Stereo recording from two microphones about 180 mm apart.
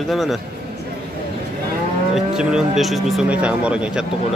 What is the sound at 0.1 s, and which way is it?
Speech, centre (ahead or behind).